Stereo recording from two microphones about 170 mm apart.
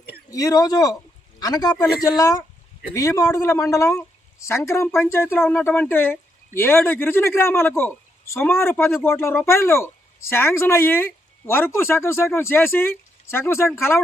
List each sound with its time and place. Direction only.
0.3 s speech: 20° left (ahead or behind)